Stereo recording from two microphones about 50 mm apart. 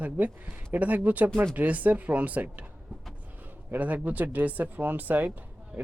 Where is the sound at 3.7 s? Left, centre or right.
Right.